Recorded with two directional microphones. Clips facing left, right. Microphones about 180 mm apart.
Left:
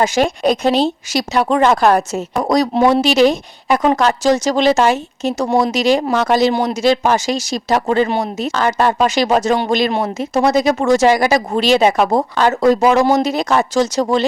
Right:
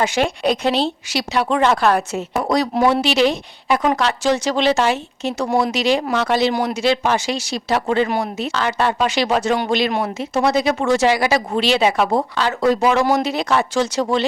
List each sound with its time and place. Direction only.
0.0 s speech: 40° left (ahead or behind)
6.5 s speech: 30° left (ahead or behind)
6.8 s speech: 40° left (ahead or behind)
8.0 s speech: 25° left (ahead or behind)
8.4 s speech: 45° left (ahead or behind)